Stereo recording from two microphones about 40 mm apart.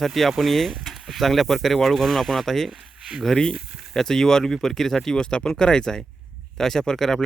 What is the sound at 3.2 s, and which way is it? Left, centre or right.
Speech, centre.